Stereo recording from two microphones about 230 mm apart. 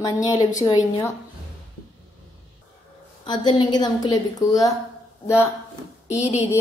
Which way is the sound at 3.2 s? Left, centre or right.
Centre.